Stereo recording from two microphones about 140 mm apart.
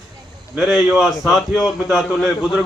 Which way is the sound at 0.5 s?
5° right (ahead or behind).